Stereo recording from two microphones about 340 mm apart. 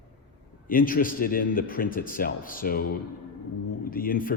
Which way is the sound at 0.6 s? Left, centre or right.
Left.